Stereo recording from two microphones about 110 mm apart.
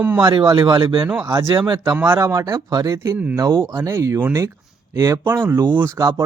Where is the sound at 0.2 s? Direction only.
50° right (ahead or behind).